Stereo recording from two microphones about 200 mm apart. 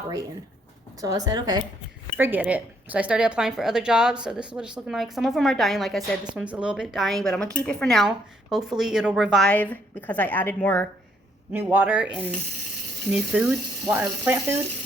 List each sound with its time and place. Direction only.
1.0 s a woman's voice: 20° right (ahead or behind)
2.1 s a woman's voice: 10° right (ahead or behind); by 10.8 s 10° left (ahead or behind)
11.5 s speech: 10° right (ahead or behind)